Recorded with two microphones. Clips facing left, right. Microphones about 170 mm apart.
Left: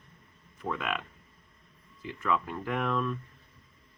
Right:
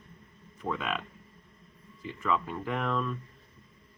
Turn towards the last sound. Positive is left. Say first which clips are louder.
# left 1 dB
turn(degrees=5)  # may be behind; listen again after turning